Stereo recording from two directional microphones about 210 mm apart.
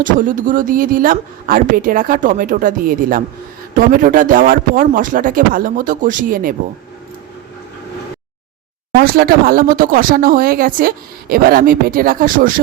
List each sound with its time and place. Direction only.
0.0 s speech: 40° right (ahead or behind)
9.0 s speech: 45° right (ahead or behind)